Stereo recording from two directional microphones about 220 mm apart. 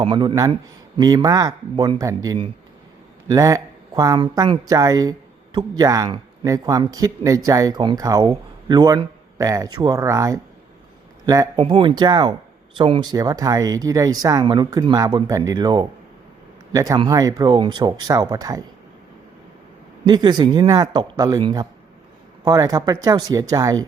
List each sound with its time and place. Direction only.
0.0 s speech: 20° right (ahead or behind)
20.1 s speech: 20° right (ahead or behind)